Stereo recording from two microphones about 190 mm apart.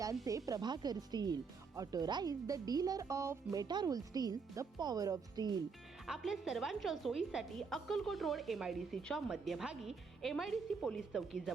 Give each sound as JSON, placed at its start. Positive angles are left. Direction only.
{"t": 0.0, "sound": "speech", "side_deg": -15}
{"t": 6.1, "sound": "a woman's voice", "side_deg": 0}